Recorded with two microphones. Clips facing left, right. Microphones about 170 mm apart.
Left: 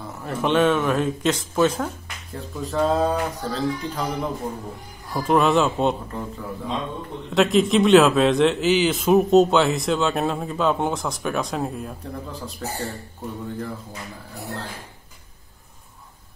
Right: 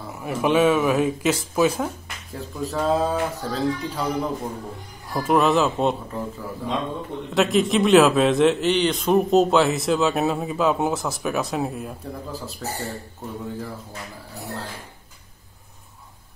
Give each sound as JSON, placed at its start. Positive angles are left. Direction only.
{"t": 0.2, "sound": "a man's voice", "side_deg": -10}
{"t": 7.3, "sound": "a man's voice", "side_deg": 0}